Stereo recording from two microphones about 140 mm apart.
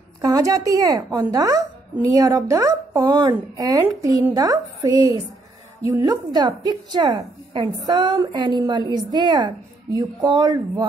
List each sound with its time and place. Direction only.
0.2 s a woman's voice: 25° right (ahead or behind)